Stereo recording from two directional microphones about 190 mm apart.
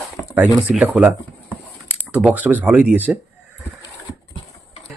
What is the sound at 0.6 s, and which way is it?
A man's voice, 5° right (ahead or behind).